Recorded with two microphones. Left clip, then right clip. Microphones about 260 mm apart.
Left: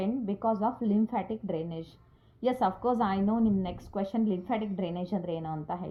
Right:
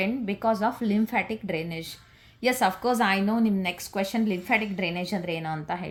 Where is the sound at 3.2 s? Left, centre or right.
Right.